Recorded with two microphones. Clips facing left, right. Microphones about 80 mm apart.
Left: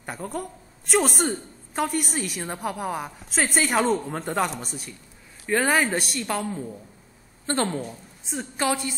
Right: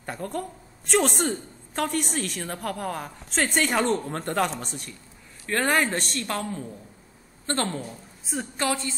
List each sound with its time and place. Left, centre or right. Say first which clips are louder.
0.0 s a woman's voice: even; centre